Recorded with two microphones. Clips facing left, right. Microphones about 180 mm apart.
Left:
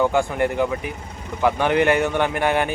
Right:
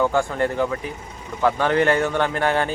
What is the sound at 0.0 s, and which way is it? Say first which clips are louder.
A man's voice: left 1 dB; 15° left (ahead or behind).